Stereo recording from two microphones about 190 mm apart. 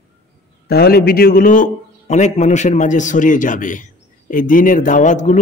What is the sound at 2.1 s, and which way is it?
Speech, 40° left (ahead or behind).